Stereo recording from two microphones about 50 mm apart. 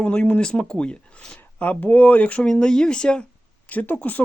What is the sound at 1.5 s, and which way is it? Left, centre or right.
Speech, left.